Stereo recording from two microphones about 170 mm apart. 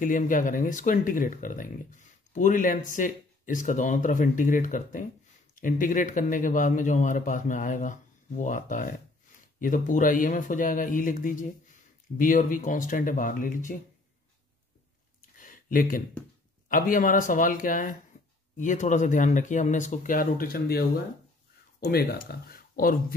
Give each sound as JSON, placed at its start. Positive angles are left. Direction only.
{"t": 0.0, "sound": "speech", "side_deg": 50}
{"t": 15.3, "sound": "a sound", "side_deg": 50}
{"t": 16.6, "sound": "speech", "side_deg": 50}